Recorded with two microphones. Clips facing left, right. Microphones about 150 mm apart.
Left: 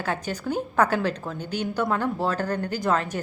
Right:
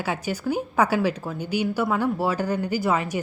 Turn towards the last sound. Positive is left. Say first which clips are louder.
# right 1 dB
turn(degrees=-10)  # may be behind; listen again after turning